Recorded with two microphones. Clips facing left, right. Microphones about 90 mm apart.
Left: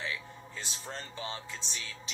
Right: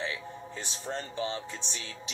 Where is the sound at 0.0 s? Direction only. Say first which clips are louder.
Right 3 dB; 25° right (ahead or behind).